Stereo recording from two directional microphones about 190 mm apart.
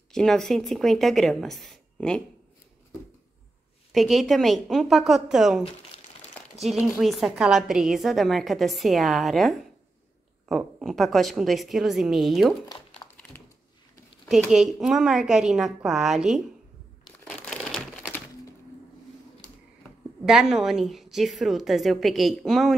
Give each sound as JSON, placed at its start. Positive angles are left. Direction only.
{"t": 0.1, "sound": "a woman's voice", "side_deg": 5}
{"t": 3.9, "sound": "a woman's voice", "side_deg": 0}
{"t": 6.6, "sound": "a woman's voice", "side_deg": 0}
{"t": 12.6, "sound": "crumpling", "side_deg": 25}
{"t": 14.3, "sound": "a woman's voice", "side_deg": 0}
{"t": 17.0, "sound": "crumpling", "side_deg": 5}
{"t": 20.2, "sound": "a woman's voice", "side_deg": 0}